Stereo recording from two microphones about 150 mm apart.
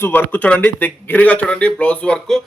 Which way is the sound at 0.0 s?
15° left (ahead or behind).